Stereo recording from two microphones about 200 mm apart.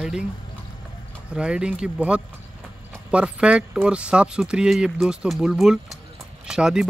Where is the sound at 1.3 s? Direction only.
5° right (ahead or behind).